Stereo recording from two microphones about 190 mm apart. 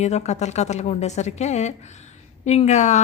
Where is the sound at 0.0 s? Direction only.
35° left (ahead or behind).